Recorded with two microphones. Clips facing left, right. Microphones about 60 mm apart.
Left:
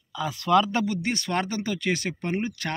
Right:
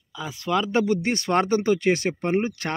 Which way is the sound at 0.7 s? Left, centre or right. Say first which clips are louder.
Right 4 dB; right.